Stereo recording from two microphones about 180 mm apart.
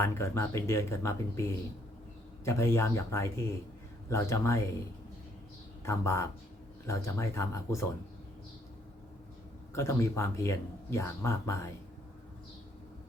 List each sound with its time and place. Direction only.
0.0 s speech: 15° left (ahead or behind)
5.8 s speech: 15° left (ahead or behind)
9.7 s speech: 15° left (ahead or behind)